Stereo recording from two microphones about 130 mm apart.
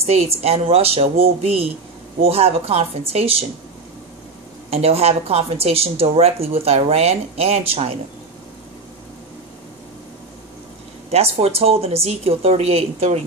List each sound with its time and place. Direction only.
0.0 s a woman's voice: 55° right (ahead or behind)
4.6 s a woman's voice: 50° right (ahead or behind)
11.1 s a woman's voice: 50° right (ahead or behind)